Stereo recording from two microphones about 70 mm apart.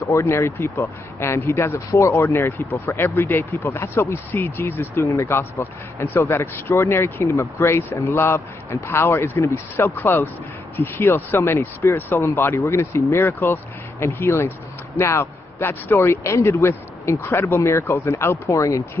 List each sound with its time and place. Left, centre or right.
0.0 s speech: left
0.3 s speech: left
5.0 s speech: left